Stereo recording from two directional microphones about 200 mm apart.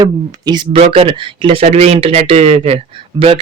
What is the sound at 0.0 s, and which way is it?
Speech, 20° right (ahead or behind).